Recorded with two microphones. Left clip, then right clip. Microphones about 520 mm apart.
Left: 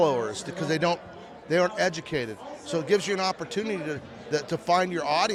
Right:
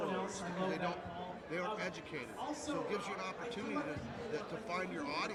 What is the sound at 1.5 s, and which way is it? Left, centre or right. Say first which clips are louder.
A man's voice: left 17 dB; left.